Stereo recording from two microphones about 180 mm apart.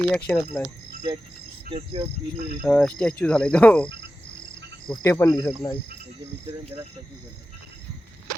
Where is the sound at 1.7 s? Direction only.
30° right (ahead or behind).